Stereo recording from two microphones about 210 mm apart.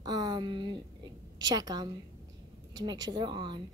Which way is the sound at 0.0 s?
20° right (ahead or behind).